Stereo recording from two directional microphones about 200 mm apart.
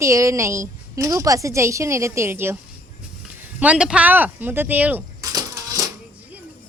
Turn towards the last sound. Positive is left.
turn(degrees=-15)  # may be behind; listen again after turning